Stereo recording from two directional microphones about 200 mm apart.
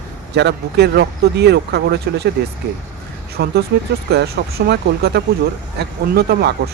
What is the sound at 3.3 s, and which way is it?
Speech, 50° right (ahead or behind).